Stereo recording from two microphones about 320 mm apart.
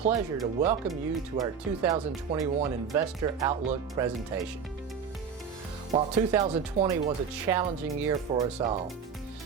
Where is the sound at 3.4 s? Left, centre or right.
Centre.